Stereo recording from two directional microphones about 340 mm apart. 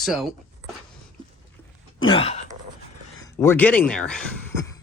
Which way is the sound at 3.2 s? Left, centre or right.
Centre.